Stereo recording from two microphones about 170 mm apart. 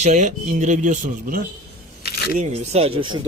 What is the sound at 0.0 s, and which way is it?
Speech, 45° right (ahead or behind).